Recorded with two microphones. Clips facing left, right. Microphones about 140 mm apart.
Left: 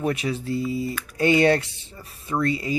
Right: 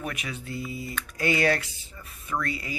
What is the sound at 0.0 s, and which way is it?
Speech, 30° left (ahead or behind).